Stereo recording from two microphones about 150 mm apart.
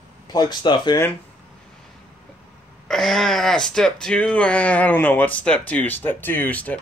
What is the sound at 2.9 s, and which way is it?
Speech, 5° left (ahead or behind).